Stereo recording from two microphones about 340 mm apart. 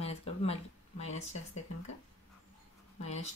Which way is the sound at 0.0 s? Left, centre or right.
Centre.